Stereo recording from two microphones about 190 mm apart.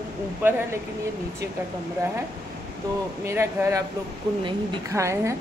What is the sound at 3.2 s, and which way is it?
A woman's voice, 15° right (ahead or behind).